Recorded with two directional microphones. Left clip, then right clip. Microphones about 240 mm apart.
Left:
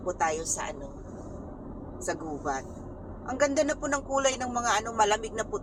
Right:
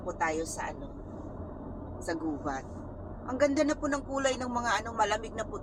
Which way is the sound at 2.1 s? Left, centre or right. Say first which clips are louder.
Left 2 dB; left.